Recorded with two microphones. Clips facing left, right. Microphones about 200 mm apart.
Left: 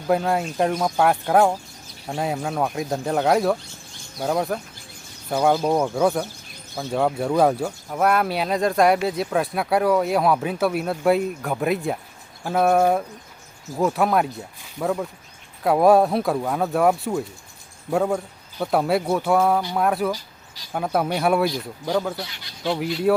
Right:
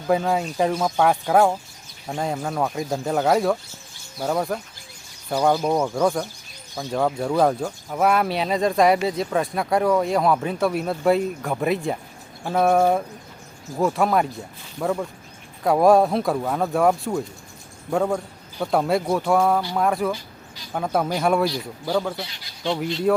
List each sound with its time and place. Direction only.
0.1 s speech: centre (ahead or behind)